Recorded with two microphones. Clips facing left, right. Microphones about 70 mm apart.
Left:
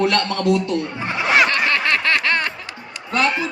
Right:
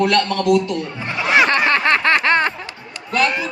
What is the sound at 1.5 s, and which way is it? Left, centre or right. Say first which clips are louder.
Snicker: right 3 dB; right.